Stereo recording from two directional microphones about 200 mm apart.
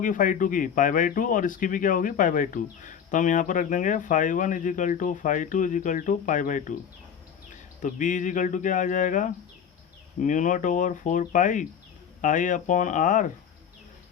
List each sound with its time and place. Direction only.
0.0 s speech: 40° left (ahead or behind)